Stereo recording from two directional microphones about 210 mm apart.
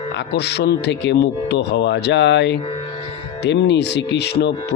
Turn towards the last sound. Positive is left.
turn(degrees=55)  # may be behind; listen again after turning